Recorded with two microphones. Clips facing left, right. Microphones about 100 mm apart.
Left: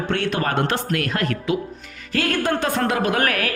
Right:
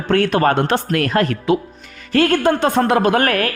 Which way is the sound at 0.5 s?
30° right (ahead or behind).